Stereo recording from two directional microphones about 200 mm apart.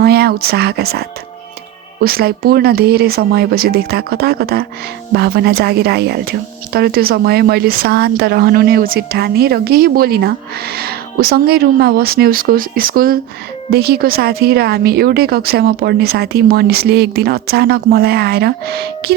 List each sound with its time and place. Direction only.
0.0 s speech: 50° right (ahead or behind)